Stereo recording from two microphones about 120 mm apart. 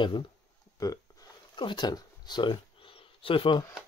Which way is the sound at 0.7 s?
30° left (ahead or behind).